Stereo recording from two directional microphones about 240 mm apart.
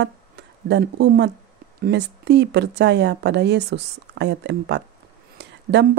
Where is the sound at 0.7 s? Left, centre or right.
Right.